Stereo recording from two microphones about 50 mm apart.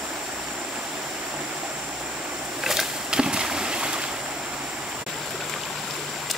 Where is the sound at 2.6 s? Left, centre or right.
Centre.